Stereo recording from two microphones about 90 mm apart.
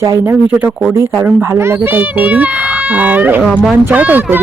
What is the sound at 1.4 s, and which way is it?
A woman's voice, 30° right (ahead or behind).